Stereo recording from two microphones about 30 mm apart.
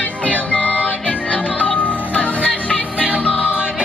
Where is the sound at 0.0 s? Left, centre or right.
Left.